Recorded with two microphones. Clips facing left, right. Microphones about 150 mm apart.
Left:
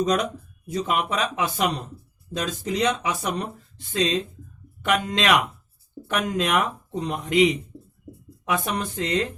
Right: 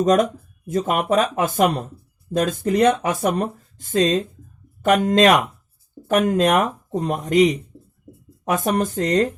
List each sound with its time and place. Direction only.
0.0 s speech: 45° right (ahead or behind)